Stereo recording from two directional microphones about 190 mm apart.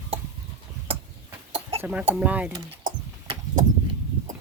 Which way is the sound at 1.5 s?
30° right (ahead or behind).